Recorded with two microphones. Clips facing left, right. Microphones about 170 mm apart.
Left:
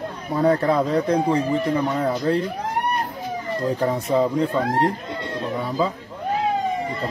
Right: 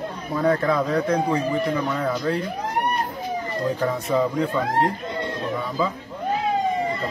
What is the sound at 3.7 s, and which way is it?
Speech, 30° left (ahead or behind).